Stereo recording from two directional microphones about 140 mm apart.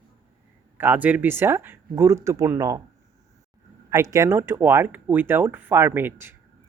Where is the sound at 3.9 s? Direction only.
20° right (ahead or behind).